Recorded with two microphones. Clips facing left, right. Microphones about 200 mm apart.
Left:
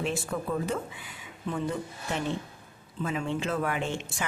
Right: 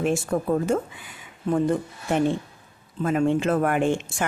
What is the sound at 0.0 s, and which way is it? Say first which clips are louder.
A woman's voice: right 7 dB; 45° right (ahead or behind).